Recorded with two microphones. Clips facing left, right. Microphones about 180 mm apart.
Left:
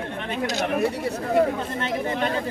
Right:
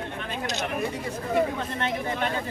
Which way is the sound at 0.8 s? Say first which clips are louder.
Left 6 dB; 70° left (ahead or behind).